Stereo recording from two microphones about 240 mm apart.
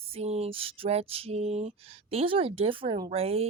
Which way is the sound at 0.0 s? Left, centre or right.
Right.